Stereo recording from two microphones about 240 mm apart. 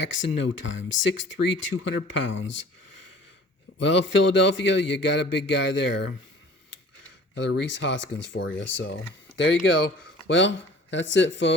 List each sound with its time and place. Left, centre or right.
0.1 s a man's voice: left
3.8 s a man's voice: left
7.3 s a man's voice: left